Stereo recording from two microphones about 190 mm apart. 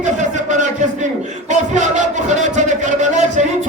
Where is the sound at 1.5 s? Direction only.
40° right (ahead or behind).